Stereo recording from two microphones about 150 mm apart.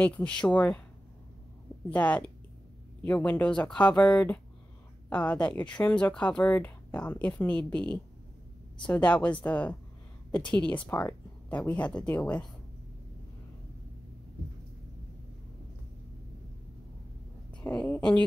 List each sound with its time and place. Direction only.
0.0 s speech: 10° left (ahead or behind)
1.9 s speech: 10° left (ahead or behind)
17.6 s speech: 10° left (ahead or behind)